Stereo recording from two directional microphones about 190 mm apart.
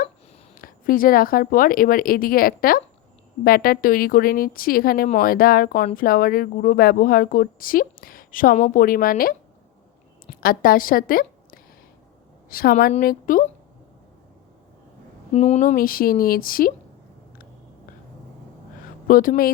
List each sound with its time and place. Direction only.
0.5 s a woman's voice: 50° left (ahead or behind)
10.4 s a woman's voice: 50° left (ahead or behind)
15.3 s a woman's voice: 35° left (ahead or behind)
19.0 s a woman's voice: 45° left (ahead or behind)